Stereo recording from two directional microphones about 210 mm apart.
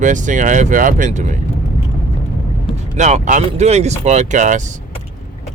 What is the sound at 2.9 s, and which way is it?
Speech, 35° right (ahead or behind).